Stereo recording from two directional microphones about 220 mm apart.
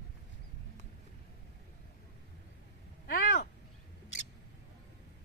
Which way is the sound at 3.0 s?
45° left (ahead or behind).